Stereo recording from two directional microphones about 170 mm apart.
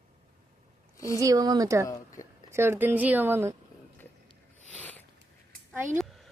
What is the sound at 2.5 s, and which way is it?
A woman's voice, 15° right (ahead or behind).